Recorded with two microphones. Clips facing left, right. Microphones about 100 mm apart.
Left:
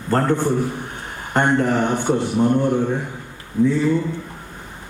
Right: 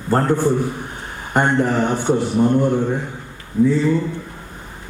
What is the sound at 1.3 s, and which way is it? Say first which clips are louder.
Speech: right 1 dB; 5° right (ahead or behind).